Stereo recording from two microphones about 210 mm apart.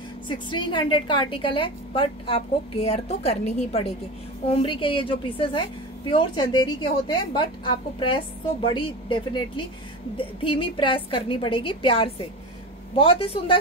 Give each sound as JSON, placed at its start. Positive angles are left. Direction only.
{"t": 0.3, "sound": "a woman's voice", "side_deg": 20}